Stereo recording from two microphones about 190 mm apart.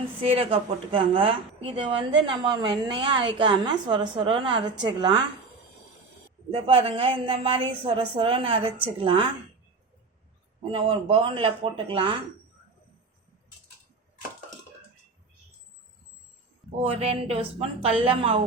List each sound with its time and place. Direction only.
0.2 s a woman's voice: 30° right (ahead or behind)
6.5 s a woman's voice: 30° right (ahead or behind)
10.7 s a woman's voice: 30° right (ahead or behind)
16.8 s speech: 30° right (ahead or behind)